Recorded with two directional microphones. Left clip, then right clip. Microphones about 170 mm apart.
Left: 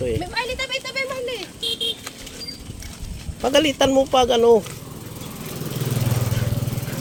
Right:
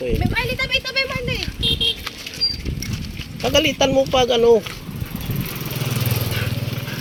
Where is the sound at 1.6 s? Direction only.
90° left.